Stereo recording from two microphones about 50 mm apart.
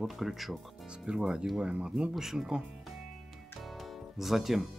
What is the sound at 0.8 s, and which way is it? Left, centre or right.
Speech, centre.